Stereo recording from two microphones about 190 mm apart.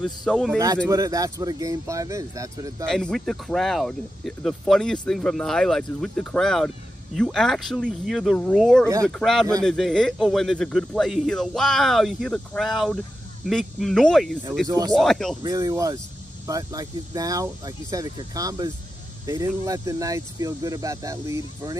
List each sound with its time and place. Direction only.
0.0 s speech: centre (ahead or behind)
0.8 s speech: 15° right (ahead or behind)
2.9 s speech: 5° left (ahead or behind)
8.8 s speech: 15° right (ahead or behind)
9.2 s speech: centre (ahead or behind)
14.7 s speech: 20° right (ahead or behind)
15.0 s speech: centre (ahead or behind)
15.4 s speech: 20° right (ahead or behind)